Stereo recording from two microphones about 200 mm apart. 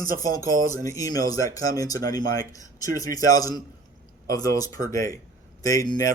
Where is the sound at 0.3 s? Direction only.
20° left (ahead or behind).